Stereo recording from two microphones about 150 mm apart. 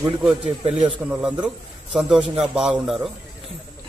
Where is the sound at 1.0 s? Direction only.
Centre (ahead or behind).